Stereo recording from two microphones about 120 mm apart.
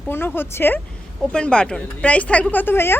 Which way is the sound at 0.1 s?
20° left (ahead or behind).